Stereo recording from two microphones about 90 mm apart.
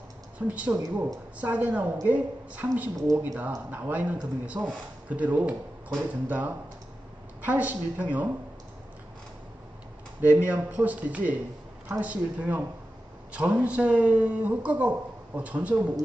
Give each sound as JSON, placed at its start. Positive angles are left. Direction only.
{"t": 0.3, "sound": "a woman's voice", "side_deg": -15}
{"t": 10.2, "sound": "speech", "side_deg": -20}